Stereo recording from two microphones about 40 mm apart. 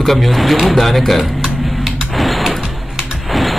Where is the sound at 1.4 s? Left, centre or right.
Centre.